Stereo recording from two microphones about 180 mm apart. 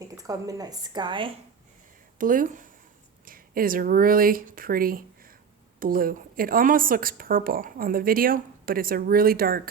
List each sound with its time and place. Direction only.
0.2 s a woman's voice: 20° right (ahead or behind)
2.1 s a woman's voice: 50° right (ahead or behind)